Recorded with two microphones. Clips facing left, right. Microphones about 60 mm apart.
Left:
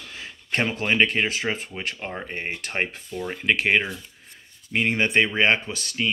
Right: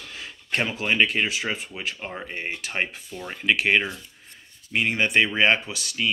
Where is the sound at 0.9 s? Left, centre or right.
Left.